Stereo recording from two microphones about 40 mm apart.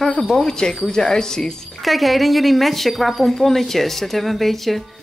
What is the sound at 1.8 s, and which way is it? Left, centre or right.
A woman's voice, centre.